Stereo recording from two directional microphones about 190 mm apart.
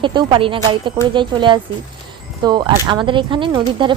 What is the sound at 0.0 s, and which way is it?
Speech, 25° right (ahead or behind).